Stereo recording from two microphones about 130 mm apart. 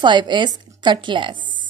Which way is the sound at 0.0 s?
35° right (ahead or behind).